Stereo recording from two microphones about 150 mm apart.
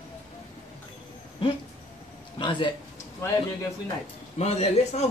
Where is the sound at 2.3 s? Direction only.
35° left (ahead or behind).